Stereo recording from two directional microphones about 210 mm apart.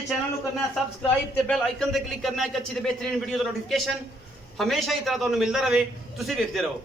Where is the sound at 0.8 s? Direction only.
Centre (ahead or behind).